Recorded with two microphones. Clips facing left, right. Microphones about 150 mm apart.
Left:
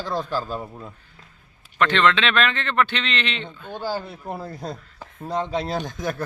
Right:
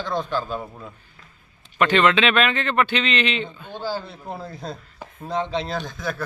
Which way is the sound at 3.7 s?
10° left (ahead or behind).